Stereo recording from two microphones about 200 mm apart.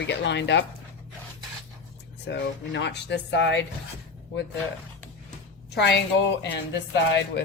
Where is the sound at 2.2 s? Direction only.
60° left (ahead or behind).